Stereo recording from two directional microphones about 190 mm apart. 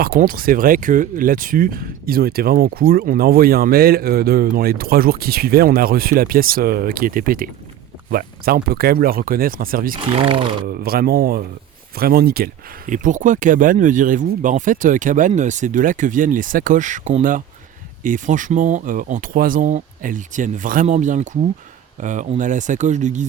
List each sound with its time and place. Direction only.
0.0 s speech: 50° right (ahead or behind)
9.9 s speech: 25° right (ahead or behind)
10.7 s speech: 55° right (ahead or behind)